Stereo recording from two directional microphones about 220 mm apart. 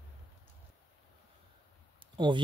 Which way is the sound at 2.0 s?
20° right (ahead or behind).